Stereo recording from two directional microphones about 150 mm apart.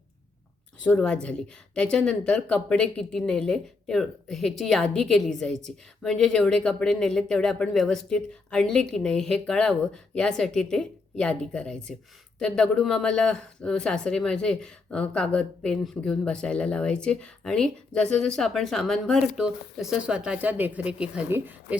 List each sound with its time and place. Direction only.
0.9 s speech: 5° left (ahead or behind); by 21.8 s 15° right (ahead or behind)